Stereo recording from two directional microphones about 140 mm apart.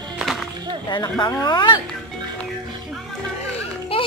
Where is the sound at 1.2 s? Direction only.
30° left (ahead or behind).